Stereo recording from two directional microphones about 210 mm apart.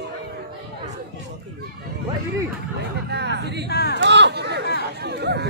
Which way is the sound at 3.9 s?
55° right (ahead or behind).